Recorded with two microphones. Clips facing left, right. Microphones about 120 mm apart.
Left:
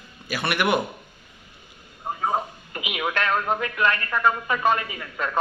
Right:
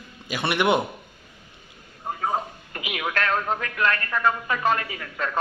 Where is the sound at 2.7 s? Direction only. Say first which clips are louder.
Left 1 dB; 20° left (ahead or behind).